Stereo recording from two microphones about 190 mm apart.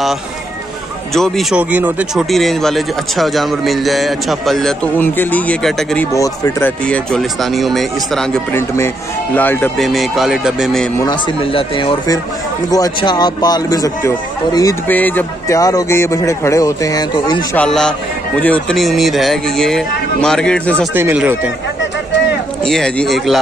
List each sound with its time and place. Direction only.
1.1 s speech: centre (ahead or behind)
6.1 s speech: 15° left (ahead or behind)
6.9 s speech: 5° left (ahead or behind)
8.5 s speech: 15° left (ahead or behind)
11.0 s speech: 25° left (ahead or behind)
17.6 s speech: 5° left (ahead or behind)
20.9 s speech: 10° right (ahead or behind)
22.7 s speech: 5° left (ahead or behind)